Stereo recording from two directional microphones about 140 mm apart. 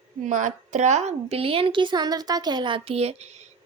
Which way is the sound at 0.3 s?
60° right (ahead or behind).